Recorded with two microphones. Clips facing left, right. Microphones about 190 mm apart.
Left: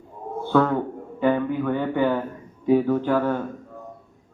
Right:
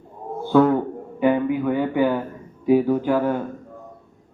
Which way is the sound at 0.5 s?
10° right (ahead or behind).